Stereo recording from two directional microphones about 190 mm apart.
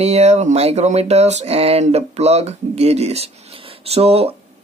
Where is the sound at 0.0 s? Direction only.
35° right (ahead or behind).